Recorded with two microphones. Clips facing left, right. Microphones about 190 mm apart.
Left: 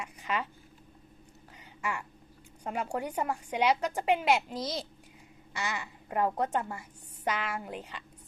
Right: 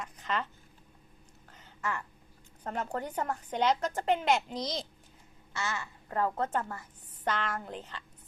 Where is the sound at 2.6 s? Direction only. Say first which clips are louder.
Left 2 dB; 10° left (ahead or behind).